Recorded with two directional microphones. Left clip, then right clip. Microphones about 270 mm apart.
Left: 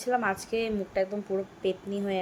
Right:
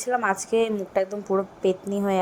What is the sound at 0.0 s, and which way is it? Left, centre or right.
A woman's voice, centre.